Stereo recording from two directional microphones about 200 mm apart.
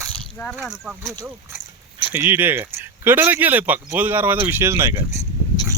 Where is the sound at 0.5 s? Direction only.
5° right (ahead or behind).